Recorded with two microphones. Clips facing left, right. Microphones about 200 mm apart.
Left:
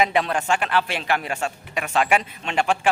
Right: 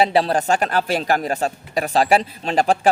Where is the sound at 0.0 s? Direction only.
35° right (ahead or behind).